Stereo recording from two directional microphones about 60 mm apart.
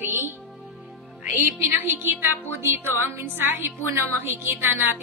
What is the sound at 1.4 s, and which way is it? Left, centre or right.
A woman's voice, right.